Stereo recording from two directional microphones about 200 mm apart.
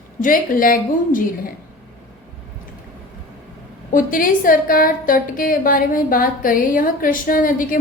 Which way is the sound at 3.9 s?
45° left (ahead or behind).